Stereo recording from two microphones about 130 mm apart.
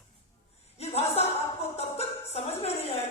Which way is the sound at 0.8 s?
55° left (ahead or behind).